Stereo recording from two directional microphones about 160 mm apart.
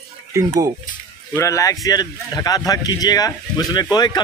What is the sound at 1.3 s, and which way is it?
Speech, 20° left (ahead or behind).